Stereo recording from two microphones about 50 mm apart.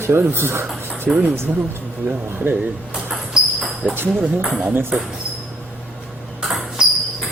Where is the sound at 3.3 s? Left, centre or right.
Centre.